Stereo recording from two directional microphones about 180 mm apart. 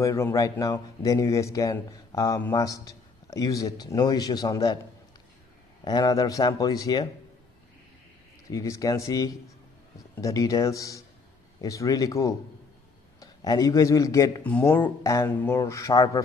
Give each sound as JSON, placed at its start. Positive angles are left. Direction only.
{"t": 0.0, "sound": "a man's voice", "side_deg": 15}
{"t": 5.9, "sound": "a man's voice", "side_deg": 20}
{"t": 8.5, "sound": "a man's voice", "side_deg": 15}